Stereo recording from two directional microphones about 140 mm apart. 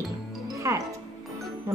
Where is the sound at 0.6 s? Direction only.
20° right (ahead or behind).